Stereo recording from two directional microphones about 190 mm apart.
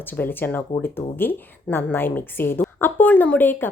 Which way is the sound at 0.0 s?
10° left (ahead or behind).